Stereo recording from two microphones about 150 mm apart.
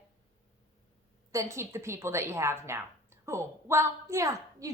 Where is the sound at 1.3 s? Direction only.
20° right (ahead or behind).